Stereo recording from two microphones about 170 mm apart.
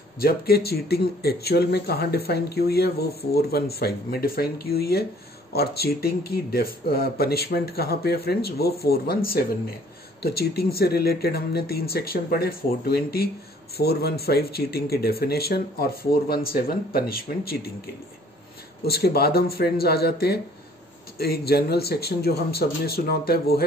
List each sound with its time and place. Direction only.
0.2 s speech: 65° left (ahead or behind)
18.9 s speech: 65° left (ahead or behind)